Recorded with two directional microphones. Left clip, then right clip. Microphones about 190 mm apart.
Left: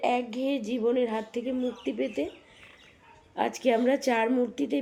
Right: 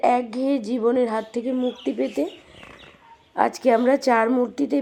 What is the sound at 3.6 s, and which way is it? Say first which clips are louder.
Speech: right 5 dB; 45° right (ahead or behind).